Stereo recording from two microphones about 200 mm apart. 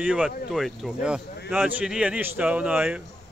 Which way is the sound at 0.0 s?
5° right (ahead or behind).